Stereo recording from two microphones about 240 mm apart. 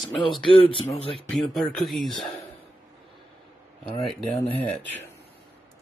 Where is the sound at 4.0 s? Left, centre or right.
Centre.